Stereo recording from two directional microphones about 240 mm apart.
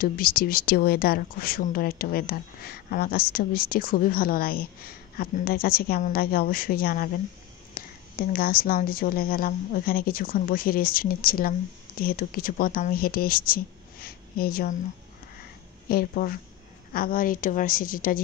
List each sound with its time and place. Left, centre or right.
0.0 s a woman's voice: left
15.9 s speech: left